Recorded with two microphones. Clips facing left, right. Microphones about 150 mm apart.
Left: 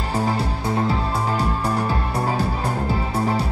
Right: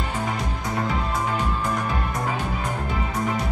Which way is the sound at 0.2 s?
30° left (ahead or behind).